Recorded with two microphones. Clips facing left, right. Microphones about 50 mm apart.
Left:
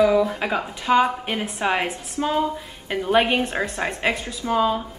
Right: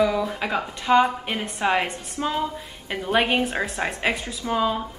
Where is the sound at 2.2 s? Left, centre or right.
Centre.